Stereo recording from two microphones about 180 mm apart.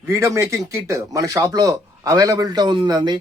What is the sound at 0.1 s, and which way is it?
Speech, 15° right (ahead or behind).